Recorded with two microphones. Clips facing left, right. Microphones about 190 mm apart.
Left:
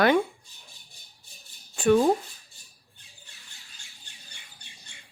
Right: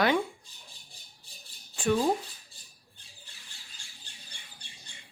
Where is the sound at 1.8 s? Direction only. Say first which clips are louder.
Left 6 dB; 55° left (ahead or behind).